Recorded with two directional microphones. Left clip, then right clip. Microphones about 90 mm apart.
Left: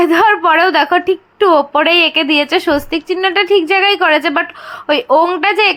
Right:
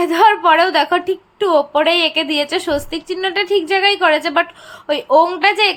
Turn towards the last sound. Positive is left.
turn(degrees=45)  # may be behind; listen again after turning